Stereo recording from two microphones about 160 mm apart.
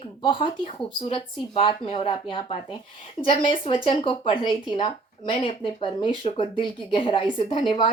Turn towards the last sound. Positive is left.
turn(degrees=30)  # may be behind; listen again after turning